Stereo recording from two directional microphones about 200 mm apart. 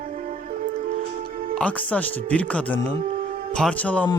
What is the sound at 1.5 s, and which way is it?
Speech, 5° left (ahead or behind).